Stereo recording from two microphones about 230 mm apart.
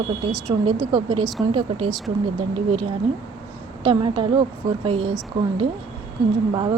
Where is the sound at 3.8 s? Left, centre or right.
Right.